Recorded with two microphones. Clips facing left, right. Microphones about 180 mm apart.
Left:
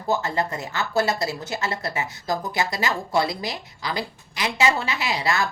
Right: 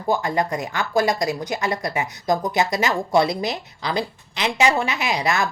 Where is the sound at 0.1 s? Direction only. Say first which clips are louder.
Right 3 dB; 15° right (ahead or behind).